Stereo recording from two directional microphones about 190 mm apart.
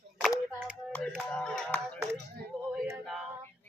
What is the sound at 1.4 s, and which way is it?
Music, 5° left (ahead or behind).